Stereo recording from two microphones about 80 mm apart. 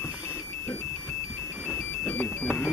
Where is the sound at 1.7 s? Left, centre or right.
Centre.